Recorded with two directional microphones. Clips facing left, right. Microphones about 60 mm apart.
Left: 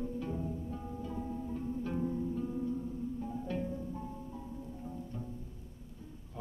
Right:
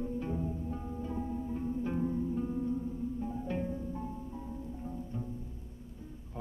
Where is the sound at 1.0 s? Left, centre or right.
Right.